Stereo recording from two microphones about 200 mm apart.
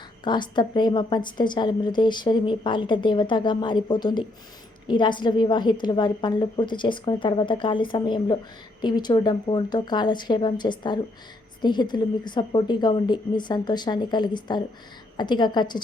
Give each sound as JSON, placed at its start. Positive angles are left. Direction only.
{"t": 0.3, "sound": "a woman's voice", "side_deg": 20}